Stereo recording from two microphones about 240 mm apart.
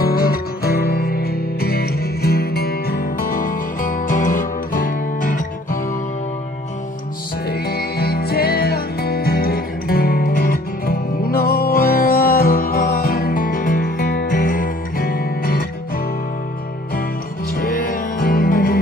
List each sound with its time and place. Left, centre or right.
0.0 s music: left
7.4 s music: left
17.6 s music: left